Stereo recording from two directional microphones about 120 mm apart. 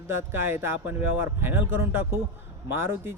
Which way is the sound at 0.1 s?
20° right (ahead or behind).